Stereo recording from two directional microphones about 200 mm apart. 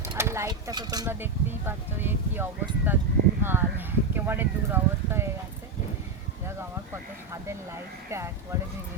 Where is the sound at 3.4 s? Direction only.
10° right (ahead or behind).